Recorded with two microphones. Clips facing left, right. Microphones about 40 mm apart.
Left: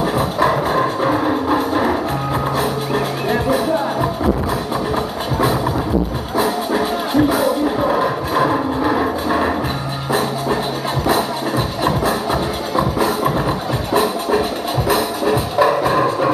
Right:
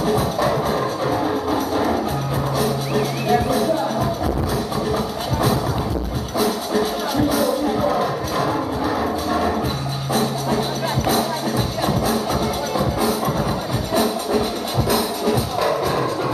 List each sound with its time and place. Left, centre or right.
0.0 s music: left
6.3 s music: left
11.8 s music: left
13.9 s music: left